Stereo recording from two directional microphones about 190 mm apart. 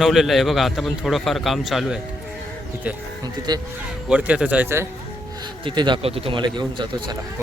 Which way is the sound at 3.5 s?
20° right (ahead or behind).